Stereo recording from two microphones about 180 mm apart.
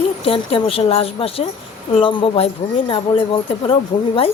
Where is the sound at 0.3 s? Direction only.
30° left (ahead or behind).